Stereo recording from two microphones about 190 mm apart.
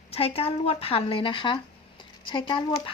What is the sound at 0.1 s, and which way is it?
A woman's voice, 30° left (ahead or behind).